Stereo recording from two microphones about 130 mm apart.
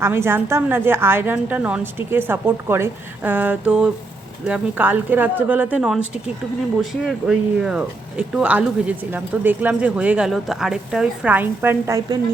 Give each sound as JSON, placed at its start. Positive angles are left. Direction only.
{"t": 0.0, "sound": "speech", "side_deg": -20}